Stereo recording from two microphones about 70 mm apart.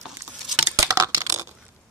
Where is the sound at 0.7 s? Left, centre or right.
Right.